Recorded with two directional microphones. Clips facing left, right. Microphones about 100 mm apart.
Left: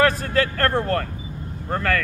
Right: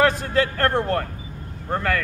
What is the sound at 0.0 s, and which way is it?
A man's voice, 15° right (ahead or behind).